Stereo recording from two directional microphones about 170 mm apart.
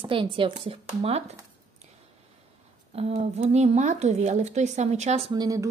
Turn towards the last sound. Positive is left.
turn(degrees=-20)  # may be behind; listen again after turning